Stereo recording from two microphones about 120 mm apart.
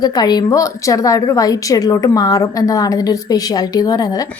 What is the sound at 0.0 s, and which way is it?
A woman's voice, 35° left (ahead or behind).